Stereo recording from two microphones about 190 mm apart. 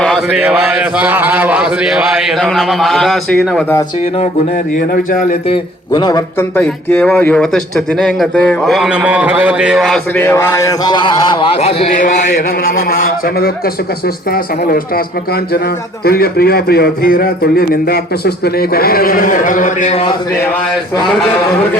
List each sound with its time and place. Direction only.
0.0 s speech: 5° right (ahead or behind)
5.5 s a man's voice: 20° left (ahead or behind)
6.6 s speech: 5° left (ahead or behind)
10.2 s a man's voice: 15° left (ahead or behind)
12.6 s a man's voice: 50° left (ahead or behind)
16.0 s a man's voice: 55° left (ahead or behind); by 20.1 s 30° left (ahead or behind)